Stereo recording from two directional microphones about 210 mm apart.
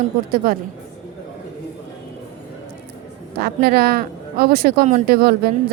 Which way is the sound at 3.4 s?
45° right (ahead or behind).